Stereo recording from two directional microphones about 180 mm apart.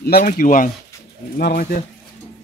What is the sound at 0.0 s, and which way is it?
Speech, 55° left (ahead or behind).